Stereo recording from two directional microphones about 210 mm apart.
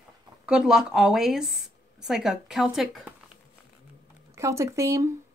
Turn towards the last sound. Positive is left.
turn(degrees=-15)  # may be behind; listen again after turning